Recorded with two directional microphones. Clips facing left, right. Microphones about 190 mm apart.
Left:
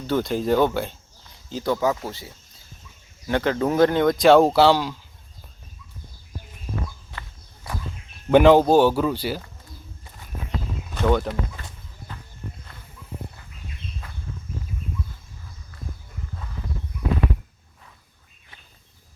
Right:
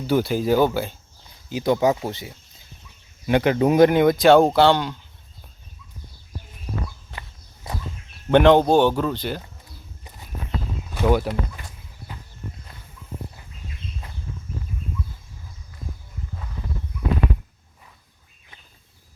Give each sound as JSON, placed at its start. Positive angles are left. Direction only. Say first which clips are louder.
{"t": 0.1, "sound": "speech", "louder": "right 2 dB", "side_deg": -5}
{"t": 1.5, "sound": "speech", "louder": "right 3 dB", "side_deg": -15}
{"t": 7.2, "sound": "walk", "louder": "right 2 dB", "side_deg": -25}
{"t": 8.3, "sound": "speech", "louder": "left 1 dB", "side_deg": 5}
{"t": 10.9, "sound": "speech", "louder": "right 1 dB", "side_deg": -10}